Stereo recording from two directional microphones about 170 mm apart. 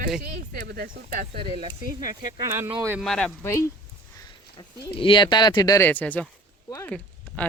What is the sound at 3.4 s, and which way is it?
Speech, 15° left (ahead or behind).